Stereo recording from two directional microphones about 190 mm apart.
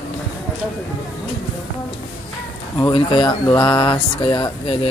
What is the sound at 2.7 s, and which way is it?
Speech, 20° left (ahead or behind).